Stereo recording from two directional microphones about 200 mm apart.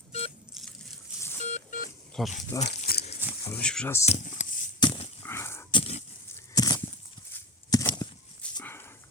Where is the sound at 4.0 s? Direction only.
35° left (ahead or behind).